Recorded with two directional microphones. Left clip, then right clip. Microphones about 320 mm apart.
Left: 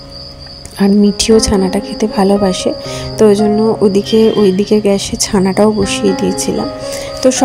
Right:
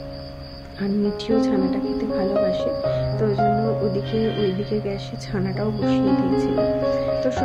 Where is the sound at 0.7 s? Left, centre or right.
Right.